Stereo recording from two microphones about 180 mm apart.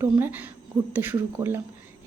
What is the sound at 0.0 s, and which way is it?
Speech, 10° right (ahead or behind).